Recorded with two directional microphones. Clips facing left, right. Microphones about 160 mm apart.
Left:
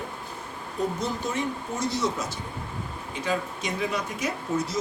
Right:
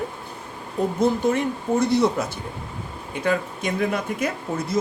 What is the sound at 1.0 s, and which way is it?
Speech, 55° right (ahead or behind).